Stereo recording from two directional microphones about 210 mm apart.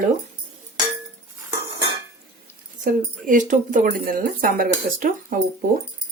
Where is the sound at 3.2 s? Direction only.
40° right (ahead or behind).